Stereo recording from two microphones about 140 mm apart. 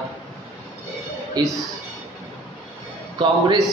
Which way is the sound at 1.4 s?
30° right (ahead or behind).